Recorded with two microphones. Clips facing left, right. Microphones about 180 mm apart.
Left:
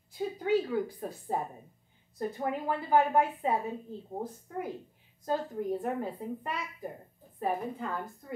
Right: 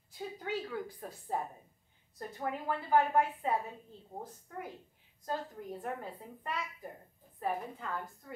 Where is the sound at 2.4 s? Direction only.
15° left (ahead or behind).